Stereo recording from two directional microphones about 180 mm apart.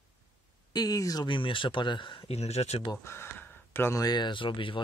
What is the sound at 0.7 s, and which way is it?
Speech, 20° left (ahead or behind).